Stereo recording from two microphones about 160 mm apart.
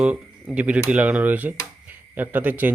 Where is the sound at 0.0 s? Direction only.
5° right (ahead or behind).